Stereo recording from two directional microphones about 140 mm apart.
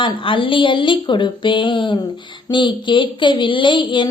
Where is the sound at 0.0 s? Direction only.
35° left (ahead or behind).